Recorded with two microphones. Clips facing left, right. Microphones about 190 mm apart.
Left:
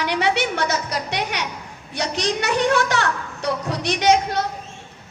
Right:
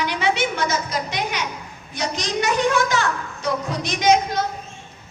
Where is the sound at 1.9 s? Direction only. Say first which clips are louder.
Left 1 dB; 70° left (ahead or behind).